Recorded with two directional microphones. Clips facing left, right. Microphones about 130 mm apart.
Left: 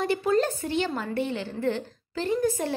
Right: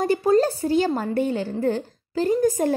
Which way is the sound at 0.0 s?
40° right (ahead or behind).